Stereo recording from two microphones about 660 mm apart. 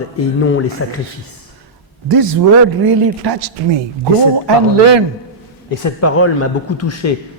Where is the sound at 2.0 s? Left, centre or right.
Right.